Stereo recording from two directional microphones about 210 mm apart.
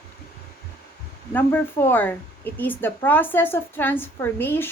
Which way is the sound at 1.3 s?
10° left (ahead or behind).